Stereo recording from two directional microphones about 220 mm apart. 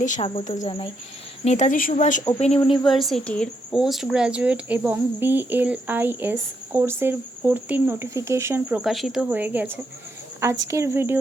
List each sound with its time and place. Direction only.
0.0 s speech: 30° left (ahead or behind)
2.8 s speech: centre (ahead or behind)